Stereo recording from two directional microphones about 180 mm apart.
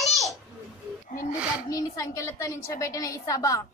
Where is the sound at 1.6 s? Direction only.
20° left (ahead or behind).